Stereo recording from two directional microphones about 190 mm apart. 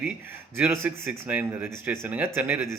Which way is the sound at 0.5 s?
15° right (ahead or behind).